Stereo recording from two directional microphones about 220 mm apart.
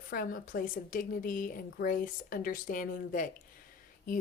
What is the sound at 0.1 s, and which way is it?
A woman's voice, 40° left (ahead or behind).